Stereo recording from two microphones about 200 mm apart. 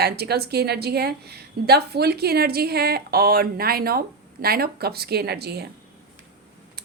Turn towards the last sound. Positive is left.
turn(degrees=-55)  # may be behind; listen again after turning